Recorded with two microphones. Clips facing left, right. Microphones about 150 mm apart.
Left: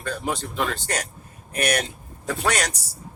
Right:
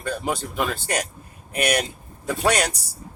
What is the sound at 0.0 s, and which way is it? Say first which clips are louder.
Speech: right 1 dB; 10° right (ahead or behind).